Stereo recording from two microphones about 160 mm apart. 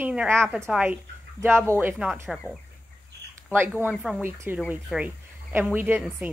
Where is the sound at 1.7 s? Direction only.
15° right (ahead or behind).